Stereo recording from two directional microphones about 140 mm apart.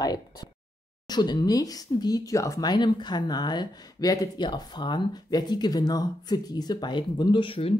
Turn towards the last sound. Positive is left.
turn(degrees=40)  # may be behind; listen again after turning